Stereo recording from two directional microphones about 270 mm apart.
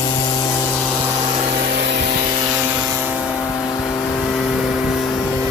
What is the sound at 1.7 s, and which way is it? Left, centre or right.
Rub, right.